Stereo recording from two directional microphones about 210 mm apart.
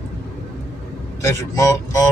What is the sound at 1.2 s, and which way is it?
Speech, 15° left (ahead or behind).